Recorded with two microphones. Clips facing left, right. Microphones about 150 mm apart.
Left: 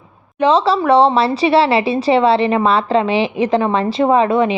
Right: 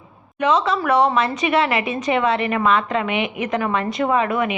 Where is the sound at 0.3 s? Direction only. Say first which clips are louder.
Left 5 dB; 30° left (ahead or behind).